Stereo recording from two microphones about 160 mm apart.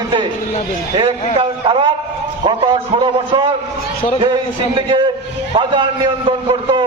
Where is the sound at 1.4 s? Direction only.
35° right (ahead or behind).